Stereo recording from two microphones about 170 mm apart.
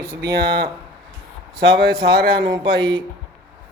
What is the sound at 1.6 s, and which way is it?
Speech, 70° right (ahead or behind).